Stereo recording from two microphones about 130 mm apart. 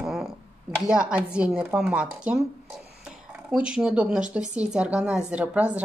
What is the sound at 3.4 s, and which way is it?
Speech, 10° right (ahead or behind).